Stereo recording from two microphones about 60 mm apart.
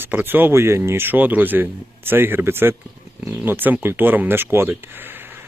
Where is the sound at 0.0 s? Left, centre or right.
Right.